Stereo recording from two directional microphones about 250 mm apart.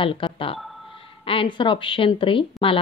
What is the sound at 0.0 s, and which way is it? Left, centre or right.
Speech, left.